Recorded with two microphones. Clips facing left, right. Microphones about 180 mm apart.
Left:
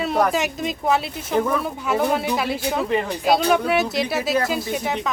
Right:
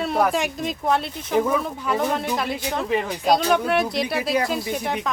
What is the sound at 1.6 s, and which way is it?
A woman's voice, 5° left (ahead or behind).